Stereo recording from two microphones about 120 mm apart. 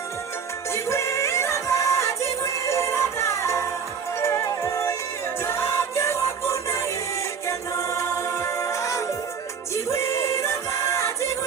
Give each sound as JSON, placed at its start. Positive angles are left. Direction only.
{"t": 0.7, "sound": "music", "side_deg": 25}